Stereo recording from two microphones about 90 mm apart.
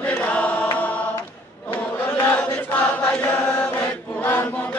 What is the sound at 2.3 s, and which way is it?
Chant, 10° left (ahead or behind).